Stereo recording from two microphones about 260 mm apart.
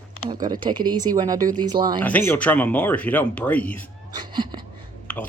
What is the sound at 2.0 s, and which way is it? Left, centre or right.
Speech, centre.